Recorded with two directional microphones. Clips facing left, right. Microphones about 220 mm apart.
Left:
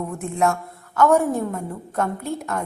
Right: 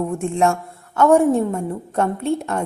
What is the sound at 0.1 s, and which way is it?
A woman's voice, 30° right (ahead or behind).